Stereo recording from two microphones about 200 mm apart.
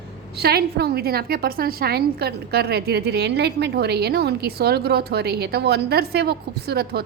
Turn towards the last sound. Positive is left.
turn(degrees=-50)  # may be behind; listen again after turning